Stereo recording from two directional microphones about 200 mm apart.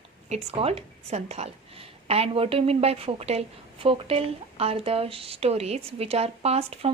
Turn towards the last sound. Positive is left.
turn(degrees=-30)  # may be behind; listen again after turning